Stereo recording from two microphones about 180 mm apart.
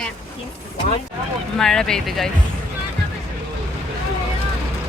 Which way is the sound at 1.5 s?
5° left (ahead or behind).